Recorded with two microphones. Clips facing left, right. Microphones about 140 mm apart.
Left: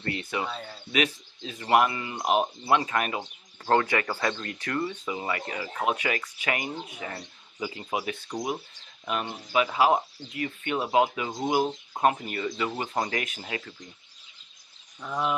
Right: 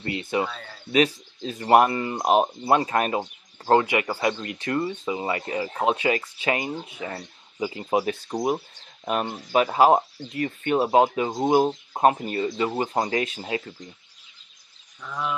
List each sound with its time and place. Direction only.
0.0 s speech: 20° right (ahead or behind)
0.9 s speech: 35° right (ahead or behind)
3.7 s speech: 15° right (ahead or behind)
15.0 s speech: 20° left (ahead or behind)